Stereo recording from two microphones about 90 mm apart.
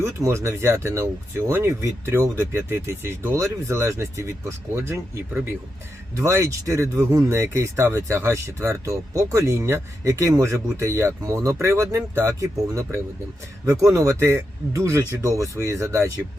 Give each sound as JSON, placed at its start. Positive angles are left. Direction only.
{"t": 0.0, "sound": "speech", "side_deg": -30}
{"t": 6.1, "sound": "speech", "side_deg": -35}